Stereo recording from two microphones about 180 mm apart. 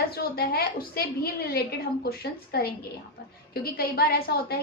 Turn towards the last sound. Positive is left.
turn(degrees=60)  # may be behind; listen again after turning